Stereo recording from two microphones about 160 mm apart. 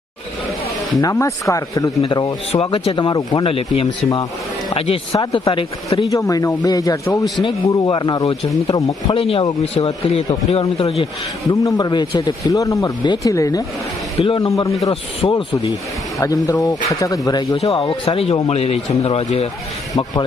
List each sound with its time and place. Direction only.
1.0 s a man's voice: 20° left (ahead or behind)
6.1 s a man's voice: 20° left (ahead or behind)
9.1 s a man's voice: 35° left (ahead or behind)
11.6 s speech: 25° left (ahead or behind)
14.2 s a man's voice: 35° left (ahead or behind)
14.4 s speech: 20° left (ahead or behind)
15.2 s a man's voice: 35° left (ahead or behind)
16.2 s a man's voice: 20° left (ahead or behind); by 19.5 s 40° left (ahead or behind)
19.9 s speech: 25° left (ahead or behind)